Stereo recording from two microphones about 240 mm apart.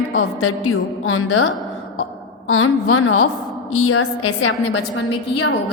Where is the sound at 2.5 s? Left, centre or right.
Left.